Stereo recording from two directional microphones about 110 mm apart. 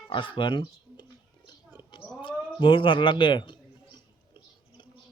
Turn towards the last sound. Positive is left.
turn(degrees=45)  # may be behind; listen again after turning